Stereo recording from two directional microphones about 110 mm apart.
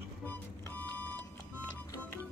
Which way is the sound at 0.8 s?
15° left (ahead or behind).